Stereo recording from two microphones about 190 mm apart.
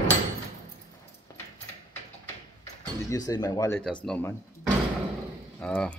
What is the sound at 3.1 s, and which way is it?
Speech, 20° left (ahead or behind).